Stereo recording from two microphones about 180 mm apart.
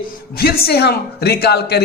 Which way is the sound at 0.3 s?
60° left (ahead or behind).